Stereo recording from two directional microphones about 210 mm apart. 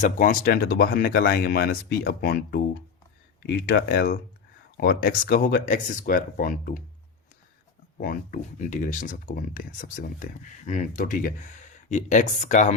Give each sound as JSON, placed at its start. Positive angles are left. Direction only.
{"t": 0.0, "sound": "speech", "side_deg": 40}
{"t": 8.0, "sound": "speech", "side_deg": 40}